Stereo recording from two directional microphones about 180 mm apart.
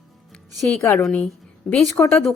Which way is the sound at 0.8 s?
15° left (ahead or behind).